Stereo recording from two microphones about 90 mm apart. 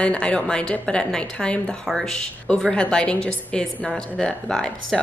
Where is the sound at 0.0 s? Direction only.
15° left (ahead or behind).